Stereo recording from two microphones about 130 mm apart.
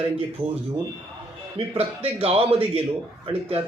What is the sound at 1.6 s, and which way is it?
Speech, 50° right (ahead or behind).